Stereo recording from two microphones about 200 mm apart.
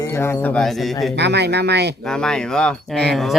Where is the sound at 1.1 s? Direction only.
55° right (ahead or behind).